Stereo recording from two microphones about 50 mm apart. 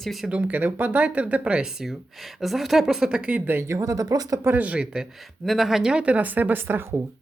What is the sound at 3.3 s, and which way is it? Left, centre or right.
Speech, right.